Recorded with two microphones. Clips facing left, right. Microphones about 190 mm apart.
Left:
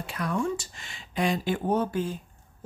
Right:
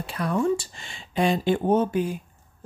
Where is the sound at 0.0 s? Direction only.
30° right (ahead or behind).